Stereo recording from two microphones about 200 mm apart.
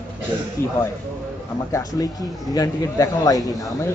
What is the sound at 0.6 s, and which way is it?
A man's voice, 15° left (ahead or behind).